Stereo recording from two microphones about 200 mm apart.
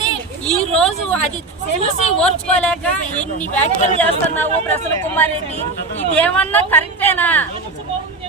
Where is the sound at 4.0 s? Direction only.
10° left (ahead or behind).